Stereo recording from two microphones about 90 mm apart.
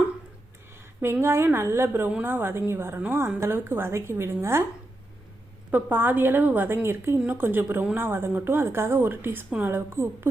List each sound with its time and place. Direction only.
1.0 s speech: 25° right (ahead or behind)
5.7 s speech: 20° right (ahead or behind)